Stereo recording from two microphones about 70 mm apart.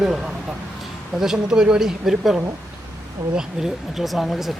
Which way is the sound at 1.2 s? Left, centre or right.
Centre.